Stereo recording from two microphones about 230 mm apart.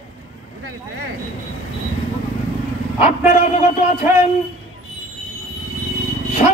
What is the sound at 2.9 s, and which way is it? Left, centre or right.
Speech, left.